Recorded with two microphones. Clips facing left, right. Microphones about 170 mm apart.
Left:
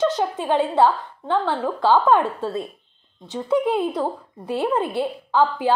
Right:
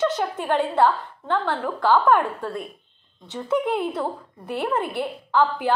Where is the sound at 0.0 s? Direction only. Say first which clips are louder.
Left 2 dB; 20° left (ahead or behind).